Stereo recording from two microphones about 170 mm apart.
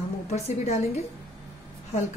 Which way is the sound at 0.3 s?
40° left (ahead or behind).